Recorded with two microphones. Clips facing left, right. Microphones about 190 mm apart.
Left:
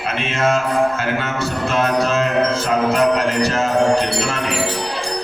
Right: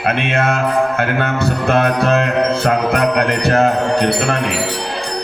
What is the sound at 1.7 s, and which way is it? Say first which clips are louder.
Music: right 4 dB; 60° right (ahead or behind).